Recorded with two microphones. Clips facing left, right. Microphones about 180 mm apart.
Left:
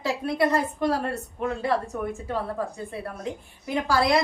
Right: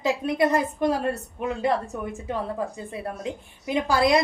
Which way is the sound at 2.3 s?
20° right (ahead or behind).